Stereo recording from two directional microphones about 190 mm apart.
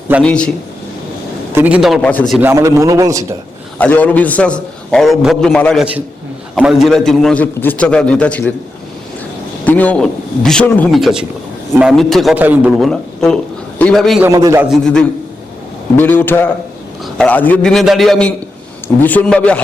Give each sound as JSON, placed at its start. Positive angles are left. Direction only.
{"t": 0.2, "sound": "a man's voice", "side_deg": 5}
{"t": 1.5, "sound": "a man's voice", "side_deg": -5}
{"t": 2.4, "sound": "a man's voice", "side_deg": -15}
{"t": 3.8, "sound": "a man's voice", "side_deg": 5}
{"t": 9.6, "sound": "a man's voice", "side_deg": 10}
{"t": 14.3, "sound": "a man's voice", "side_deg": -15}
{"t": 14.7, "sound": "a man's voice", "side_deg": 5}